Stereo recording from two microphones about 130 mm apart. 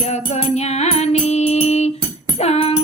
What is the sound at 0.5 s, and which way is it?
Music, 60° left (ahead or behind).